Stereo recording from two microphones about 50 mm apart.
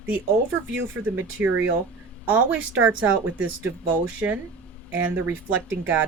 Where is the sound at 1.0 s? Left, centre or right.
Right.